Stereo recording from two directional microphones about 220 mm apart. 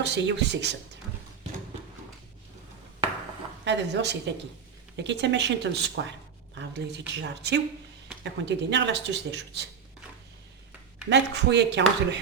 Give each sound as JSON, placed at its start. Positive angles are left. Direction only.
{"t": 0.0, "sound": "speech", "side_deg": -55}
{"t": 3.6, "sound": "speech", "side_deg": -50}
{"t": 11.1, "sound": "speech", "side_deg": -50}